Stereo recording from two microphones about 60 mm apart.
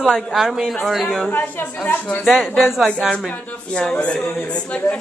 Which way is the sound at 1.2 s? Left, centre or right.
Left.